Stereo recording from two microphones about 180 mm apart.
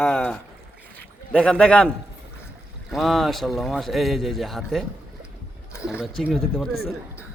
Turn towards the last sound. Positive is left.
turn(degrees=0)  # may be behind; listen again after turning